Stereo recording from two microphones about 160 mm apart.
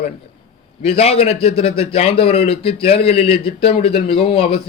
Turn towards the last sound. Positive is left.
turn(degrees=35)  # may be behind; listen again after turning